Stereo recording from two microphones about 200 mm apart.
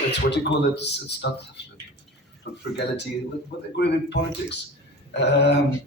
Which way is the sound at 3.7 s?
60° left (ahead or behind).